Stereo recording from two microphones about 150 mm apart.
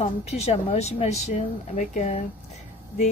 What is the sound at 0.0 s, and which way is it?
Speech, 45° left (ahead or behind).